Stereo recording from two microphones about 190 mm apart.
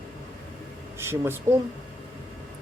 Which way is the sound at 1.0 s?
10° right (ahead or behind).